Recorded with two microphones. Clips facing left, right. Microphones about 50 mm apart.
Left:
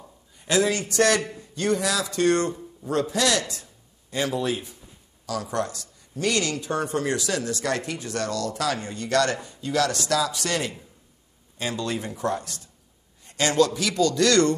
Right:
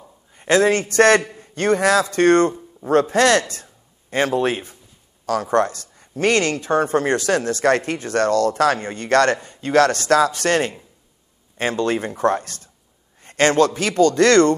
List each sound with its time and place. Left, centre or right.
0.4 s a man's voice: right